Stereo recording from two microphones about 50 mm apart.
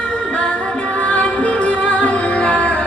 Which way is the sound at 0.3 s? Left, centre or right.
Left.